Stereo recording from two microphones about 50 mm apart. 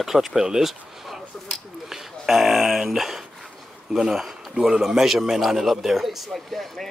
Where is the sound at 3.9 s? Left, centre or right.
Centre.